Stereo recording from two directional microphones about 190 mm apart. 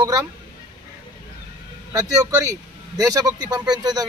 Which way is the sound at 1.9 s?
20° right (ahead or behind).